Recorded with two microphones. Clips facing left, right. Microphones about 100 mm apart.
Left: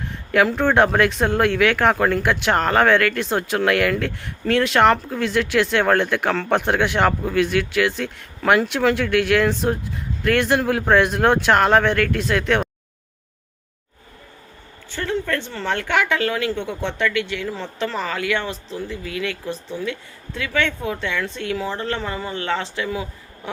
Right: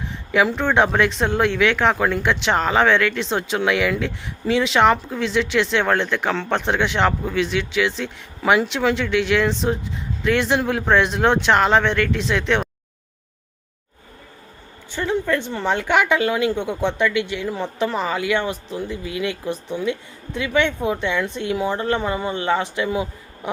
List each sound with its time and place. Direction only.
0.0 s speech: centre (ahead or behind)
14.8 s a woman's voice: 15° right (ahead or behind)